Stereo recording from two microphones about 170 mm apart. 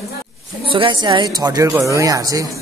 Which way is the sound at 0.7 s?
30° right (ahead or behind).